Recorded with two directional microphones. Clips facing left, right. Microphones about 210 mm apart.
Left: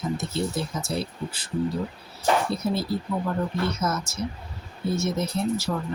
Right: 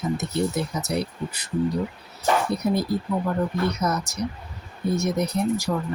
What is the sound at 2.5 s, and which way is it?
Speech, 15° right (ahead or behind).